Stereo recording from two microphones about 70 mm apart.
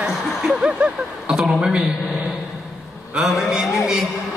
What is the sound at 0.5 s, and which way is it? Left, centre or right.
Speech, centre.